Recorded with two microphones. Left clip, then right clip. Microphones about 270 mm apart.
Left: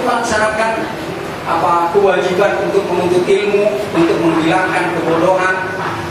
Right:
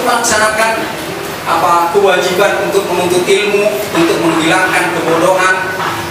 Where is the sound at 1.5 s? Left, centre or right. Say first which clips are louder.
Right 3 dB; centre.